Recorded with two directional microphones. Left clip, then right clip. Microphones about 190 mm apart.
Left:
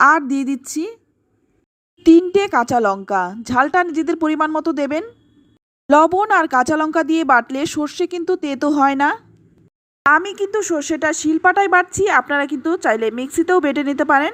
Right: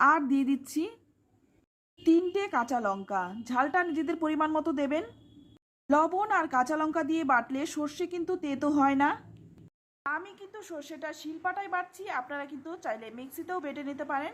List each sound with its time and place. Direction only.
0.0 s speech: 35° left (ahead or behind)
2.0 s speech: 40° left (ahead or behind)